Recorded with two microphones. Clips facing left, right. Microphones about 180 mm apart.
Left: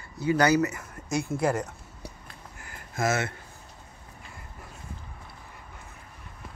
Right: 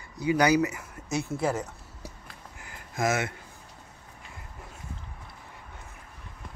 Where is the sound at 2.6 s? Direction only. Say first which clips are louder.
Even; 15° right (ahead or behind).